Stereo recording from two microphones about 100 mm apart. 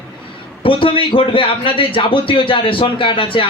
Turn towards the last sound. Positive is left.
turn(degrees=60)  # may be behind; listen again after turning